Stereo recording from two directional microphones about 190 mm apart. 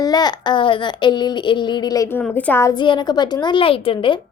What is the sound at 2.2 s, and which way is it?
Speech, 5° left (ahead or behind).